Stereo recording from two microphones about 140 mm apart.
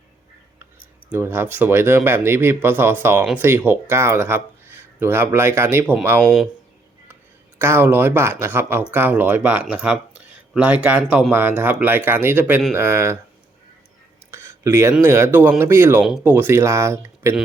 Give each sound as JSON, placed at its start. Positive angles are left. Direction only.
{"t": 1.1, "sound": "speech", "side_deg": -15}
{"t": 7.6, "sound": "speech", "side_deg": -15}
{"t": 14.3, "sound": "a sound", "side_deg": -20}
{"t": 15.0, "sound": "speech", "side_deg": -20}